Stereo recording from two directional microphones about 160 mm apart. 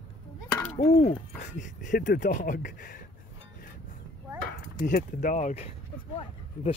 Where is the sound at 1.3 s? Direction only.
50° left (ahead or behind).